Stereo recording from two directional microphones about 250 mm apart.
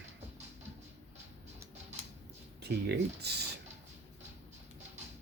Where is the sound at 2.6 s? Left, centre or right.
Right.